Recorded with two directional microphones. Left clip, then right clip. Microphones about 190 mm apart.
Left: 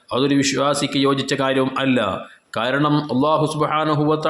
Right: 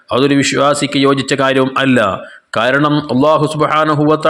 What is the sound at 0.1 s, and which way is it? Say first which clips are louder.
Speech: right 6 dB; 25° right (ahead or behind).